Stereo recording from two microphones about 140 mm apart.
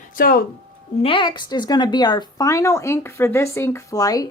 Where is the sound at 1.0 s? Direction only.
35° left (ahead or behind).